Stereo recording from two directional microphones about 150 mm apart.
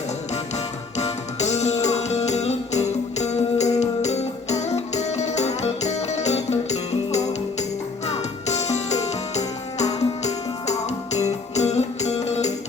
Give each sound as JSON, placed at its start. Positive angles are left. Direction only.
{"t": 0.5, "sound": "music", "side_deg": 45}